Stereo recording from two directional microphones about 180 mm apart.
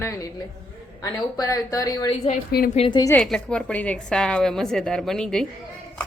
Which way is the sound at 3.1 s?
5° left (ahead or behind).